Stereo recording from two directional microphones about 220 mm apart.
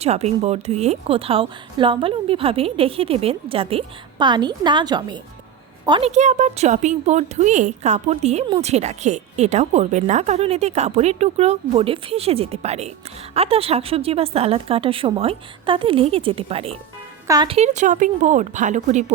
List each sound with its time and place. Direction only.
0.0 s a woman's voice: 30° right (ahead or behind)